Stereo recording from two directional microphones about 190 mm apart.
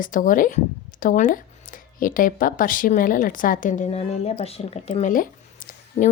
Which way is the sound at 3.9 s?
30° left (ahead or behind).